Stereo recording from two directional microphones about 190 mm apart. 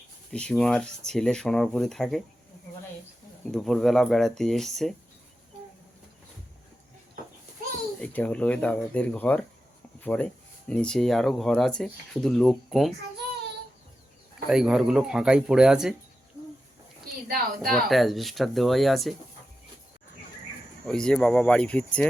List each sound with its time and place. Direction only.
0.3 s speech: 5° left (ahead or behind)
3.5 s speech: centre (ahead or behind)
8.0 s speech: 5° left (ahead or behind)
14.4 s speech: 5° right (ahead or behind)
17.2 s a woman's voice: 50° right (ahead or behind)
17.7 s speech: centre (ahead or behind)
20.8 s speech: 5° left (ahead or behind)